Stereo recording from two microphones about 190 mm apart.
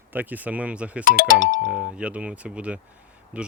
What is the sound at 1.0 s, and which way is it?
Speech, 45° left (ahead or behind).